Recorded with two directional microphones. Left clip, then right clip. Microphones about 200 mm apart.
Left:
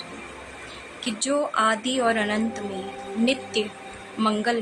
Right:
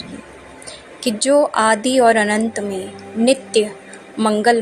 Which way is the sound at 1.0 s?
25° right (ahead or behind).